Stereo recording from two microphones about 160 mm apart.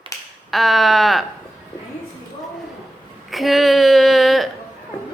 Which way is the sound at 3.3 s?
Centre (ahead or behind).